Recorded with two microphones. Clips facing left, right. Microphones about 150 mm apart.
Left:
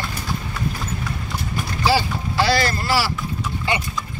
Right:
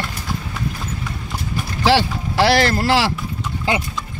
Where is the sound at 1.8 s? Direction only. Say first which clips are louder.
Right 3 dB; 90° right.